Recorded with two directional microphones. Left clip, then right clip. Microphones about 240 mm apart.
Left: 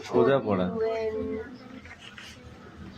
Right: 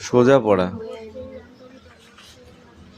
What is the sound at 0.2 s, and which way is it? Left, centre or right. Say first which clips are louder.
Speech: right 8 dB; right.